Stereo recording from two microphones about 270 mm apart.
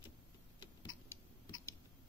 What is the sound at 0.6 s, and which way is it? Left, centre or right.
Tick-tock, centre.